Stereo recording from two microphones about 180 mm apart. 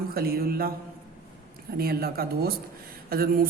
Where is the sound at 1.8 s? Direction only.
60° right (ahead or behind).